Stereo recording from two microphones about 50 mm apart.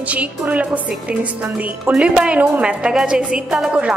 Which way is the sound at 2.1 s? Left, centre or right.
Right.